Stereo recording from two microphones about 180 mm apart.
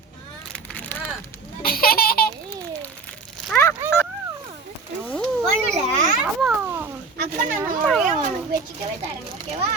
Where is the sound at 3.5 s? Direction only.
15° left (ahead or behind).